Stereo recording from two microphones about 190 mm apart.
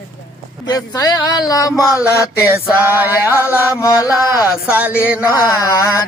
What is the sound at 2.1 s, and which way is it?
Music, 15° left (ahead or behind).